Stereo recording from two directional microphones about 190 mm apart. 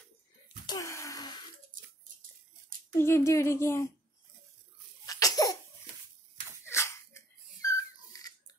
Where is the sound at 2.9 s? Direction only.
15° left (ahead or behind).